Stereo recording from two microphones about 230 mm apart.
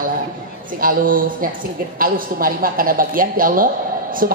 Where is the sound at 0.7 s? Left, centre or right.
Right.